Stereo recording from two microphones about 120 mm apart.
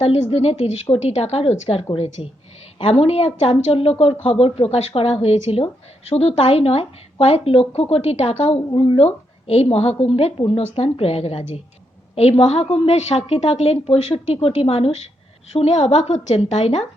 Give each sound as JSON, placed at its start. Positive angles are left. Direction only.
{"t": 0.0, "sound": "a woman's voice", "side_deg": 60}
{"t": 2.2, "sound": "a woman's voice", "side_deg": 45}
{"t": 8.7, "sound": "a woman's voice", "side_deg": 50}
{"t": 15.5, "sound": "a woman's voice", "side_deg": 65}